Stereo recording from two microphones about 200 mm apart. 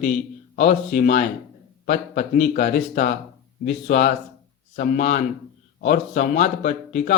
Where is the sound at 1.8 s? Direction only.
45° left (ahead or behind).